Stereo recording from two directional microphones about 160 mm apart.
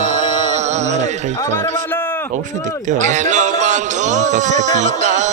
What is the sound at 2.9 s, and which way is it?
Music, 50° right (ahead or behind).